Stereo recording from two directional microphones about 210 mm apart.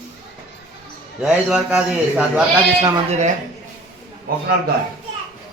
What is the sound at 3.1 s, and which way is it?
Speech, 35° right (ahead or behind).